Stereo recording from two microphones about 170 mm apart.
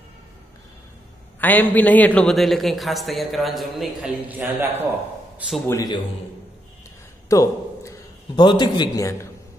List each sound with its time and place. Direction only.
1.4 s a man's voice: 10° left (ahead or behind); by 4.8 s 10° right (ahead or behind)
5.7 s a man's voice: 20° left (ahead or behind)
7.2 s a man's voice: 20° left (ahead or behind)